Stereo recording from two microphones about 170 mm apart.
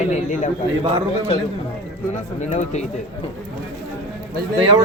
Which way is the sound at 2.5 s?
40° left (ahead or behind).